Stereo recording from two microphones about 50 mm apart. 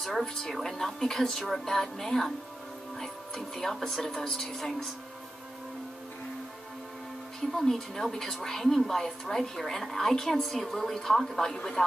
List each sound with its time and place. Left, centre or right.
0.0 s a woman's voice: centre
7.3 s a woman's voice: centre